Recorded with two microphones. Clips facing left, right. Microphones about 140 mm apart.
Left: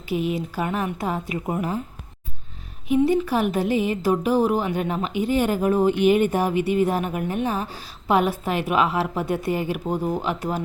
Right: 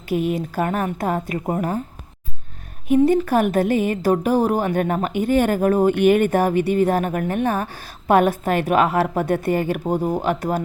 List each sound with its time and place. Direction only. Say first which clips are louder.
0.1 s speech: right 3 dB; 50° right (ahead or behind)
2.9 s speech: right 4 dB; 50° right (ahead or behind)